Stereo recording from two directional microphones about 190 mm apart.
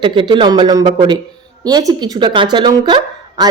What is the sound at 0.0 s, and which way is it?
Speech, 25° right (ahead or behind).